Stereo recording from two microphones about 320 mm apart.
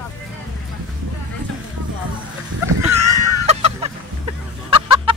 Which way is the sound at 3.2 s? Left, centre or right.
Right.